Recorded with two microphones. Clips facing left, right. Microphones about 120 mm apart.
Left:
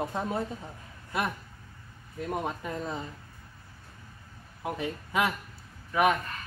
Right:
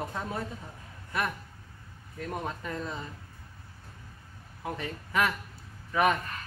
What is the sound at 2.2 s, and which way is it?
Speech, 20° left (ahead or behind).